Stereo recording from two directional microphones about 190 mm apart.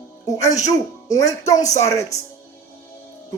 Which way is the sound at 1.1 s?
15° left (ahead or behind).